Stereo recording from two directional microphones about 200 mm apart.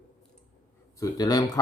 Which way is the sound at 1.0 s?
20° left (ahead or behind).